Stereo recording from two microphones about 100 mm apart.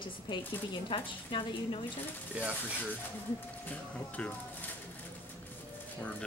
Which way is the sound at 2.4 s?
10° right (ahead or behind).